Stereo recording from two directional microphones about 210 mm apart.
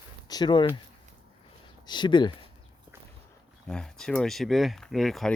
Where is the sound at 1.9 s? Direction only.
20° left (ahead or behind).